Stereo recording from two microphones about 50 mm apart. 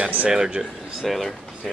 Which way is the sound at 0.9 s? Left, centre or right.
Centre.